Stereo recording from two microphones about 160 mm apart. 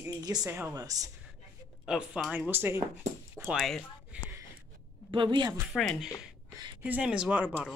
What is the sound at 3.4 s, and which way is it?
Speech, centre (ahead or behind).